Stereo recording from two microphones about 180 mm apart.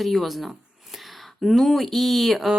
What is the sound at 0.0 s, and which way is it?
Speech, centre (ahead or behind).